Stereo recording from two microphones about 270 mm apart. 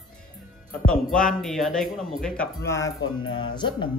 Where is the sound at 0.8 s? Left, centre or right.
Centre.